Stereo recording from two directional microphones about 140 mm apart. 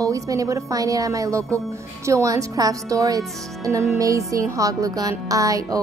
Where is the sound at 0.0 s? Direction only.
25° right (ahead or behind).